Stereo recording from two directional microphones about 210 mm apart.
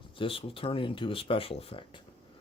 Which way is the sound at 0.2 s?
25° left (ahead or behind).